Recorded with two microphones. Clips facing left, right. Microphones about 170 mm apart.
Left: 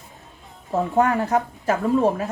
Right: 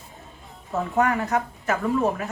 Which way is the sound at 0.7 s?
30° left (ahead or behind).